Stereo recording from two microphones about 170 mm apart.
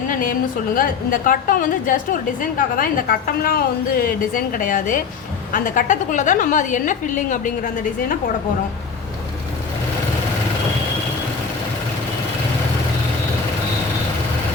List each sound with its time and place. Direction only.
0.1 s music: 55° left (ahead or behind)
0.8 s a woman's voice: 55° left (ahead or behind)